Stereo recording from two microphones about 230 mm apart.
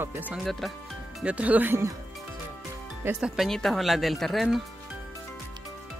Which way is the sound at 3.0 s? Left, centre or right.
Centre.